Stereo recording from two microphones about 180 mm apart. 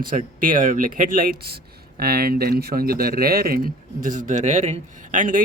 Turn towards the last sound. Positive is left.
turn(degrees=-45)  # may be behind; listen again after turning